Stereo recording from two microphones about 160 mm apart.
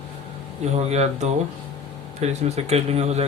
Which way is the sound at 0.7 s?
40° right (ahead or behind).